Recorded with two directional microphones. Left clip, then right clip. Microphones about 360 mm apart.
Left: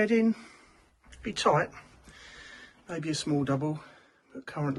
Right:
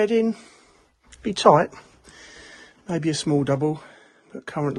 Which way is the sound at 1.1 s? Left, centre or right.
Centre.